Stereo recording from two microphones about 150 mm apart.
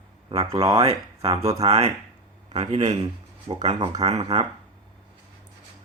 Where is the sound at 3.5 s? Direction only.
35° right (ahead or behind).